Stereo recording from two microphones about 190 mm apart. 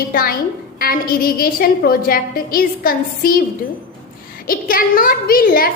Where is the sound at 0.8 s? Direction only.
50° left (ahead or behind).